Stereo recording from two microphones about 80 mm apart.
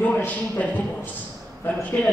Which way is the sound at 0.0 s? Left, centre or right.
Left.